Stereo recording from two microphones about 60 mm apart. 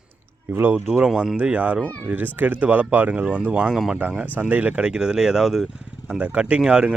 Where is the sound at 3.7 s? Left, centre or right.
Centre.